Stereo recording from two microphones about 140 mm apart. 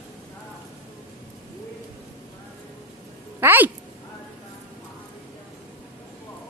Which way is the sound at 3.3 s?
15° right (ahead or behind).